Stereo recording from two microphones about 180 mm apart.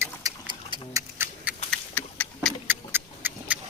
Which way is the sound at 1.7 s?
5° left (ahead or behind).